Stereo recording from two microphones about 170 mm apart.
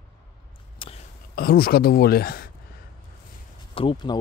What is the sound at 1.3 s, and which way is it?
Speech, 65° left (ahead or behind).